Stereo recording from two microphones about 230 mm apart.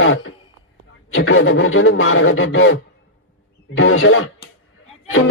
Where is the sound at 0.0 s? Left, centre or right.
Left.